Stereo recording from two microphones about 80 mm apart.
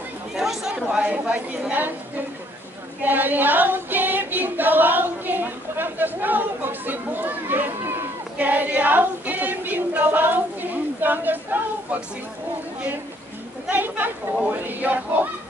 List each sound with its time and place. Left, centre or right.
0.3 s chatter: centre
0.8 s a woman's voice: centre
3.0 s choir: right
13.7 s a woman's voice: right